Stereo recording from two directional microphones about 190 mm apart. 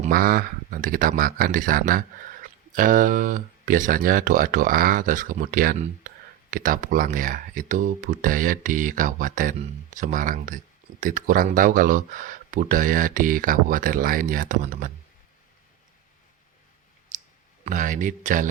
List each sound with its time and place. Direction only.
0.1 s speech: 50° right (ahead or behind)
17.1 s clicking: 40° right (ahead or behind)
17.7 s speech: 40° right (ahead or behind)